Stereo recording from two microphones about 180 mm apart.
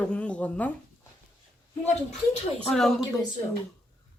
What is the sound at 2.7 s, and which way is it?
Speech, centre (ahead or behind).